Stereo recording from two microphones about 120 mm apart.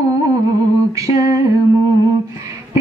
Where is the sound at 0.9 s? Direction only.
25° right (ahead or behind).